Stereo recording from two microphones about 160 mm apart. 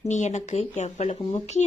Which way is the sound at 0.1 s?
45° left (ahead or behind).